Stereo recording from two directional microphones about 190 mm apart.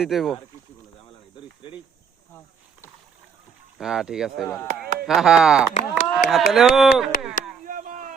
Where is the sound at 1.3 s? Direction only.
25° left (ahead or behind).